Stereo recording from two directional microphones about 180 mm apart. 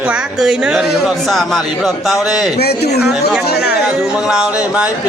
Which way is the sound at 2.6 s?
65° left (ahead or behind).